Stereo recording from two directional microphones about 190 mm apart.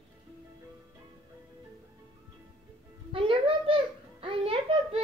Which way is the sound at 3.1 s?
30° right (ahead or behind).